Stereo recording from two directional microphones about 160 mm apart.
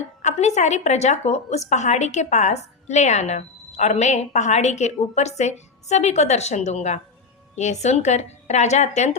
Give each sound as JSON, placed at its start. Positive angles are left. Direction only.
{"t": 0.2, "sound": "a woman's voice", "side_deg": 45}